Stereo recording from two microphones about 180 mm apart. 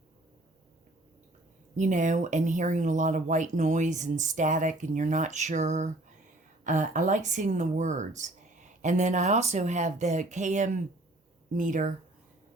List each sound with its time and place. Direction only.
1.7 s speech: 45° right (ahead or behind)